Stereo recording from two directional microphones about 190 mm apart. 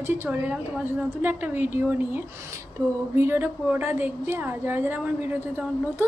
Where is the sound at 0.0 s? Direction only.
10° right (ahead or behind).